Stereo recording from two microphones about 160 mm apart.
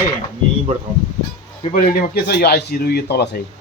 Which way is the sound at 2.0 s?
80° left.